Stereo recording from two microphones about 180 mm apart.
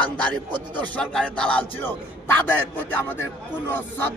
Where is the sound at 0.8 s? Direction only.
5° left (ahead or behind).